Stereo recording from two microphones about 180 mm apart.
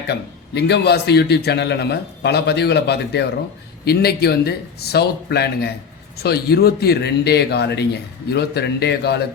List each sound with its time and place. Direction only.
0.1 s a man's voice: 65° left (ahead or behind)